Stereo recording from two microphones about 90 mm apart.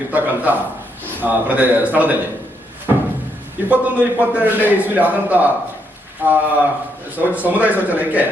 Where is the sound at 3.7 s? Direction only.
15° right (ahead or behind).